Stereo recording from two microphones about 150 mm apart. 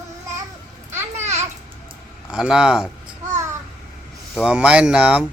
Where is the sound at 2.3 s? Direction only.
5° right (ahead or behind).